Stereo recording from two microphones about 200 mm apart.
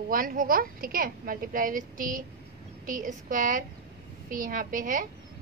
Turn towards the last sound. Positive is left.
turn(degrees=-40)  # may be behind; listen again after turning